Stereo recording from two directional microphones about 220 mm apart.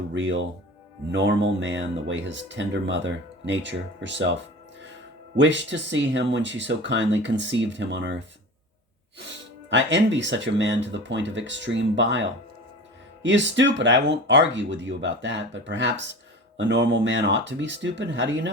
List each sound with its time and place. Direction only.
0.1 s speech: 55° right (ahead or behind)
5.4 s speech: 55° right (ahead or behind)
13.2 s speech: 55° right (ahead or behind)